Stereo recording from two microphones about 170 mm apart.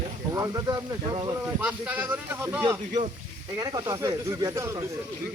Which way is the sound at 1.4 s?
10° right (ahead or behind).